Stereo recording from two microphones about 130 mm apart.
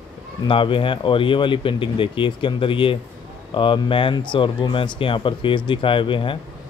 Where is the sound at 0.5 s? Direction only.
40° left (ahead or behind).